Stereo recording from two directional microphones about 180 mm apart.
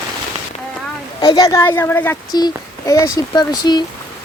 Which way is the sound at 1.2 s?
20° left (ahead or behind).